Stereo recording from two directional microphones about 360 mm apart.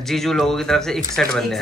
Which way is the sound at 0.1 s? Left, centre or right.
Centre.